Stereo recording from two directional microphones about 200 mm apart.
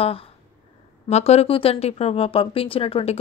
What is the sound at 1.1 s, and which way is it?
Speech, 30° left (ahead or behind).